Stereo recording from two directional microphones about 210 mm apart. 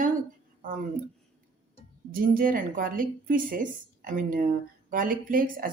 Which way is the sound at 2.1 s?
40° right (ahead or behind).